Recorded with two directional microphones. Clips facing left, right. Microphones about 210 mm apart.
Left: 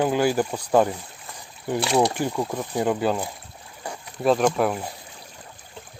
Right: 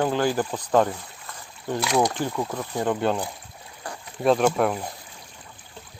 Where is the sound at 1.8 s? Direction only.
30° left (ahead or behind).